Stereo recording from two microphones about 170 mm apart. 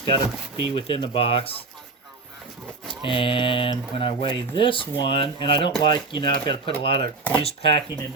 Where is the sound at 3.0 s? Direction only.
30° left (ahead or behind).